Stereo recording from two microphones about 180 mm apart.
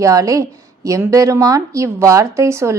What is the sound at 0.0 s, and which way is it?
A woman's voice, 20° right (ahead or behind).